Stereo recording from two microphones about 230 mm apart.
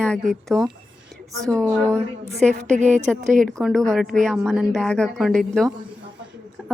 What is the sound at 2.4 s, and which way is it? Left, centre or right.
A woman's voice, centre.